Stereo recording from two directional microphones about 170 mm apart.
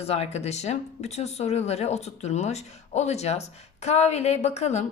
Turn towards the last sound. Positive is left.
turn(degrees=40)  # may be behind; listen again after turning